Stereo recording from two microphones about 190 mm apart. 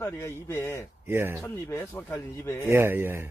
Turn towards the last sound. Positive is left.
turn(degrees=-10)  # may be behind; listen again after turning